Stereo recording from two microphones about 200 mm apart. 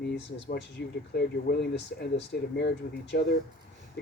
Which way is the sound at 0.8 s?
60° left (ahead or behind).